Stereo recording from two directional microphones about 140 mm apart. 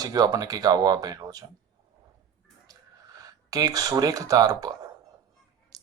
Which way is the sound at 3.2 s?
25° right (ahead or behind).